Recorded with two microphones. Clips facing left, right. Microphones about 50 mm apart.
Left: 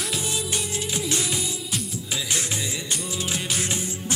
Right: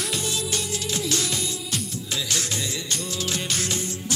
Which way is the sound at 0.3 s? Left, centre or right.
Centre.